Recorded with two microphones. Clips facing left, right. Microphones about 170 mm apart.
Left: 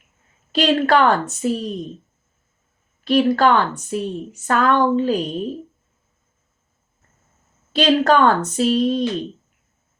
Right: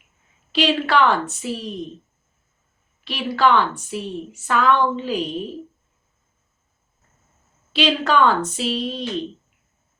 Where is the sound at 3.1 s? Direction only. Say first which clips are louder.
Left 4 dB; 45° left (ahead or behind).